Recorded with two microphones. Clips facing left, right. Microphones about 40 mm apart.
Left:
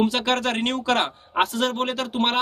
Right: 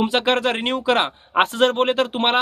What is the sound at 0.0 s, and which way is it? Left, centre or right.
Speech, right.